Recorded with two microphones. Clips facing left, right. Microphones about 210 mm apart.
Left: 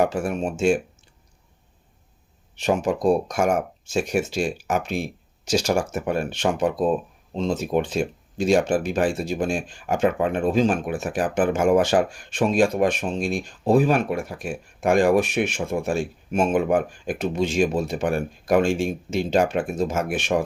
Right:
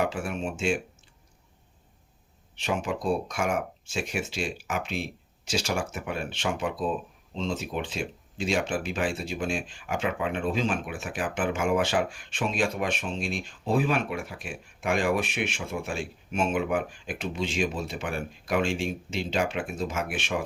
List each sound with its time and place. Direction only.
0.0 s speech: 45° left (ahead or behind)
2.6 s speech: 40° left (ahead or behind)